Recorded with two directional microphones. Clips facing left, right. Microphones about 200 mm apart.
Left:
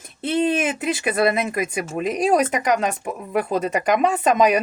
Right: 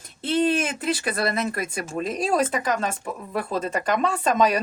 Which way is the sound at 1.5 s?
10° left (ahead or behind).